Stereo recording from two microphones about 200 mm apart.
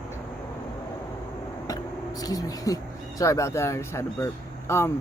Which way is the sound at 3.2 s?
15° left (ahead or behind).